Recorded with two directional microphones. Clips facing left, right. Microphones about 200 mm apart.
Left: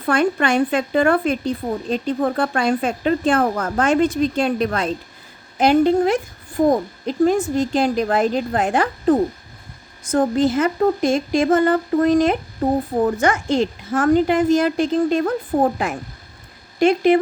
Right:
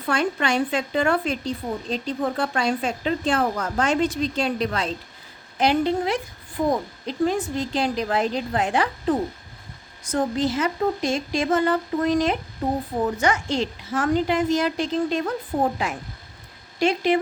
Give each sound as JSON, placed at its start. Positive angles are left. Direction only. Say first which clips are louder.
{"t": 0.0, "sound": "speech", "louder": "left 5 dB", "side_deg": 55}